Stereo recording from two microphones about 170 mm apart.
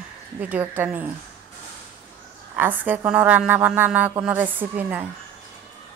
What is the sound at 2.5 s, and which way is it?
A woman's voice, 10° right (ahead or behind).